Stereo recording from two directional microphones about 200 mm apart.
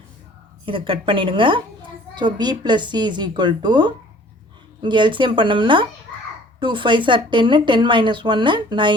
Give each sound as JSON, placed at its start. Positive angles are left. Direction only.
{"t": 0.6, "sound": "speech", "side_deg": -25}